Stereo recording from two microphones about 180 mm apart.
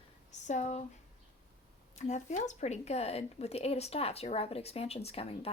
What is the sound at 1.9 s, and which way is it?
Speech, 40° left (ahead or behind).